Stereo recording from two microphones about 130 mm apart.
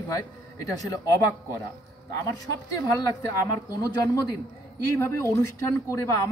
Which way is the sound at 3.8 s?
30° left (ahead or behind).